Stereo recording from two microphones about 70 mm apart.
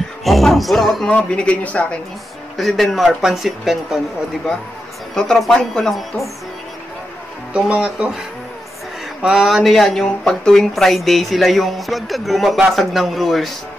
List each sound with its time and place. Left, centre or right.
0.2 s music: centre
1.1 s a woman's voice: centre
2.5 s speech: centre
5.1 s a woman's voice: centre
7.5 s speech: centre
9.2 s speech: centre